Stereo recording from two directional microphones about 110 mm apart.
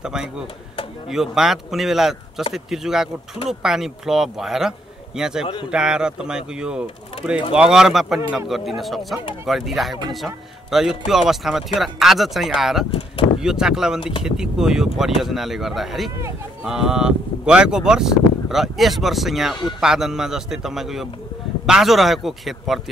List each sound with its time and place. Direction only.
0.0 s speech: 5° right (ahead or behind)
12.9 s a sound: 65° left (ahead or behind)
13.4 s speech: 5° right (ahead or behind)